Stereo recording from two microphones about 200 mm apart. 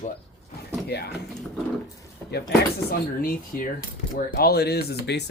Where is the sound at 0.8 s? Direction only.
55° left (ahead or behind).